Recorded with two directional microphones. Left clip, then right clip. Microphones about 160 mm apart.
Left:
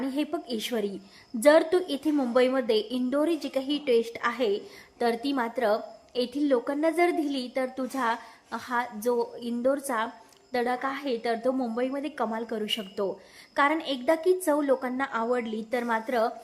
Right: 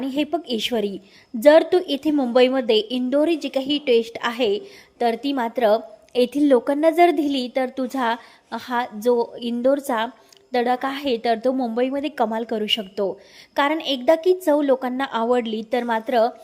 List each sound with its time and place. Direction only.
0.0 s a woman's voice: 20° right (ahead or behind)
5.5 s a woman's voice: 30° right (ahead or behind)